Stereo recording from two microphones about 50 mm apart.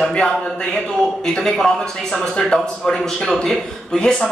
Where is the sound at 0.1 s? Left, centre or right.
Centre.